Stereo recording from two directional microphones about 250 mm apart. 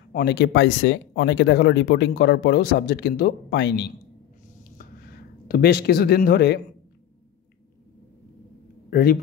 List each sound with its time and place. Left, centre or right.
0.1 s speech: left
4.7 s a sound: left
8.9 s a man's voice: left